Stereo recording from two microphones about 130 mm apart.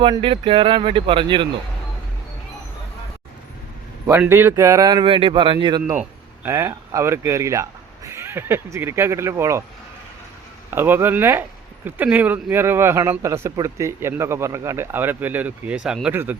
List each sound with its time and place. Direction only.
0.2 s speech: 45° right (ahead or behind)
4.3 s speech: 15° right (ahead or behind); by 5.8 s 40° right (ahead or behind)
6.0 s speech: 20° right (ahead or behind)
10.7 s a man's voice: 15° right (ahead or behind)